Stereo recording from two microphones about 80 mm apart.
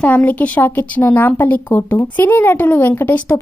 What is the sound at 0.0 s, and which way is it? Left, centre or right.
A woman's voice, centre.